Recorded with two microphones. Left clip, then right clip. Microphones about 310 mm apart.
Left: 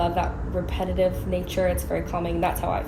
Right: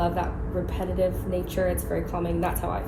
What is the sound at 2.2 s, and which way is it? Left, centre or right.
Speech, centre.